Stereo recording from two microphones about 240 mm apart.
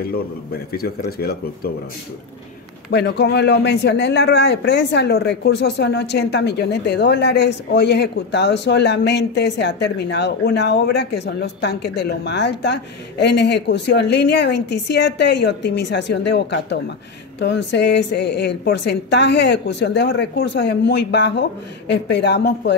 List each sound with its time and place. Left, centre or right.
0.0 s speech: left
2.9 s speech: left